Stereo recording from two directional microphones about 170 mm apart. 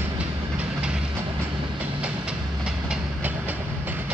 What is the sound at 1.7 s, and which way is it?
Train, 5° right (ahead or behind).